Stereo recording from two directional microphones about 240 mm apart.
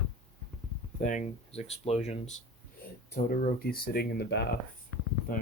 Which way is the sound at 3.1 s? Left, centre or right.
Left.